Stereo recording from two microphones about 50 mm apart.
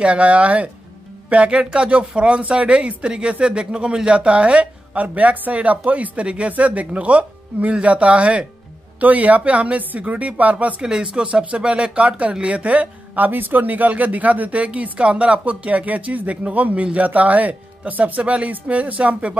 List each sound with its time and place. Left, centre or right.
0.0 s speech: right
10.8 s speech: centre